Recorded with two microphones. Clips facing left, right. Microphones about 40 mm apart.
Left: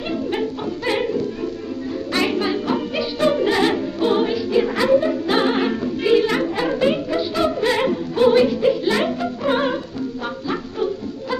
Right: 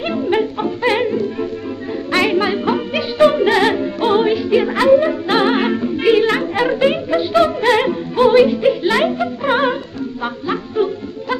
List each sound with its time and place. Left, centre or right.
0.0 s music: right
2.0 s music: right
7.8 s music: right